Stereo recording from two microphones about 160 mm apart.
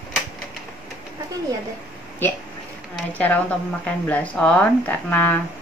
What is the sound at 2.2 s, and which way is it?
A woman's voice, 15° left (ahead or behind).